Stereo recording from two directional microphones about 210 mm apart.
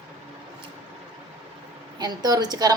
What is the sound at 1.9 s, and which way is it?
Speech, 20° right (ahead or behind).